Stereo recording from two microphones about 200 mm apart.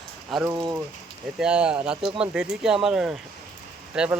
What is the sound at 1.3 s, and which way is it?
Speech, 5° right (ahead or behind).